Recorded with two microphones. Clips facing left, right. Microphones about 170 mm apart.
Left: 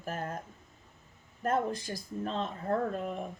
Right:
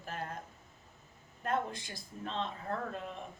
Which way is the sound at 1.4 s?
40° left (ahead or behind).